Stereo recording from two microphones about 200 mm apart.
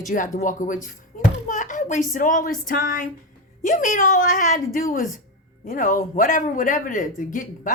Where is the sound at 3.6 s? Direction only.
40° left (ahead or behind).